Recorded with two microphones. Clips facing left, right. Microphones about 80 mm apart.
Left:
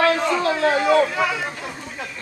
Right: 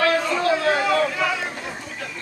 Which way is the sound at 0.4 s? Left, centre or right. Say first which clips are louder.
Left 1 dB; left.